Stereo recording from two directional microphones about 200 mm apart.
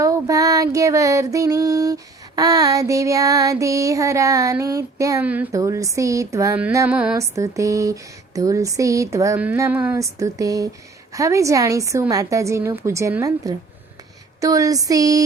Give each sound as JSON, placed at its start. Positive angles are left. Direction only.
{"t": 0.0, "sound": "female singing", "side_deg": -15}